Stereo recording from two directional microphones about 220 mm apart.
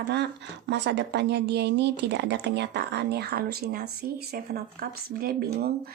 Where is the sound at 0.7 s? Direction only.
50° right (ahead or behind).